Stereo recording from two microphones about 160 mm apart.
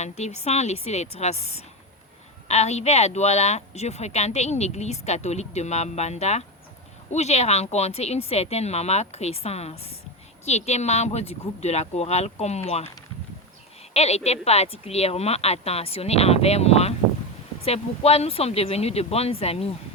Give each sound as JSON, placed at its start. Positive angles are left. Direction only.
{"t": 0.0, "sound": "speech", "side_deg": 45}
{"t": 13.9, "sound": "speech", "side_deg": 40}